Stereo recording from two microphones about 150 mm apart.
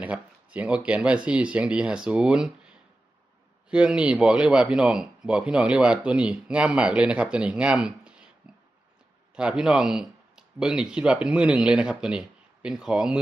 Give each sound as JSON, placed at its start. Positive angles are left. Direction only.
{"t": 0.0, "sound": "speech", "side_deg": -10}
{"t": 9.3, "sound": "speech", "side_deg": -5}